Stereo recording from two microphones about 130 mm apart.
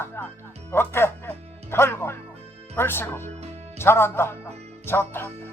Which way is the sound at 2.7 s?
15° left (ahead or behind).